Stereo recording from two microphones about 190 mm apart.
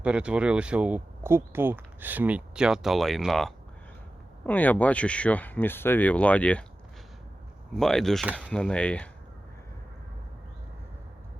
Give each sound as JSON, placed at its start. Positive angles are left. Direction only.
{"t": 0.0, "sound": "speech", "side_deg": -5}
{"t": 7.7, "sound": "speech", "side_deg": 0}